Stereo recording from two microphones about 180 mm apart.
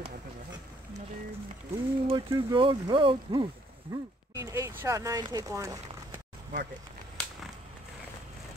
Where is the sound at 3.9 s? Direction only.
15° right (ahead or behind).